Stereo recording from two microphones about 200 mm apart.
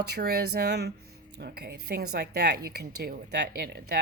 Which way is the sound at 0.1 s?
55° right (ahead or behind).